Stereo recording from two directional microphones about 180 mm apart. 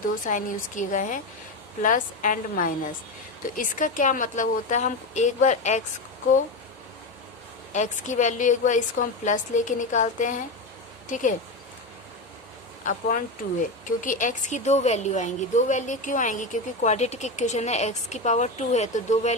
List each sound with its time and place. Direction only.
0.3 s a woman's voice: 45° left (ahead or behind)
7.7 s a woman's voice: 45° left (ahead or behind)
12.8 s speech: 50° left (ahead or behind)